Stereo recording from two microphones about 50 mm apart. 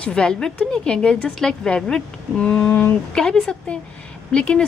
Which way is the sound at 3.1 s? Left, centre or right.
Centre.